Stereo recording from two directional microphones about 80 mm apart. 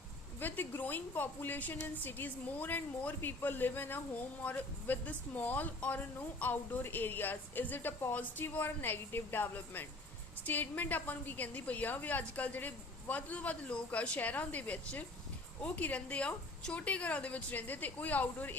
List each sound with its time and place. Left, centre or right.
0.3 s a woman's voice: left